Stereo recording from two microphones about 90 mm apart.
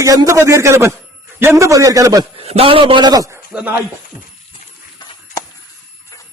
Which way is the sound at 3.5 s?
10° right (ahead or behind).